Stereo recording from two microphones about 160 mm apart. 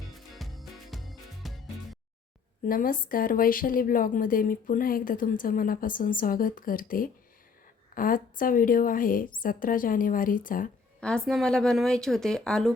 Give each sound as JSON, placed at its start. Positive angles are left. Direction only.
{"t": 0.3, "sound": "music", "side_deg": 0}
{"t": 2.6, "sound": "a woman's voice", "side_deg": 60}
{"t": 11.0, "sound": "a woman's voice", "side_deg": 5}